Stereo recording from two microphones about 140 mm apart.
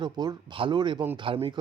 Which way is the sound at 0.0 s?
30° right (ahead or behind).